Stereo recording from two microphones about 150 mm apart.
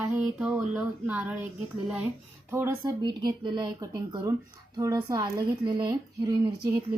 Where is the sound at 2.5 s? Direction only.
15° right (ahead or behind).